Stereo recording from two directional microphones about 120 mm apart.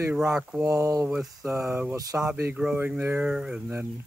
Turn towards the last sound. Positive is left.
turn(degrees=-10)  # may be behind; listen again after turning